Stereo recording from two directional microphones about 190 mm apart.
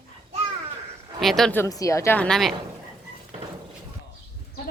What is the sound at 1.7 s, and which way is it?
Speech, 15° left (ahead or behind).